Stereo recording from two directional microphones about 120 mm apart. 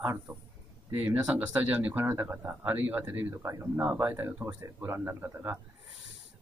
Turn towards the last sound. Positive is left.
turn(degrees=-20)  # may be behind; listen again after turning